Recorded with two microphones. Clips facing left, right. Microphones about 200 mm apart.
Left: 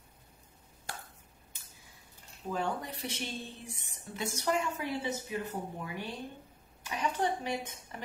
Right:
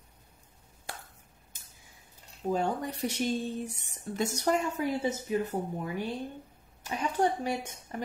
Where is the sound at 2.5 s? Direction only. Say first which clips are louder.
Right 5 dB; 40° right (ahead or behind).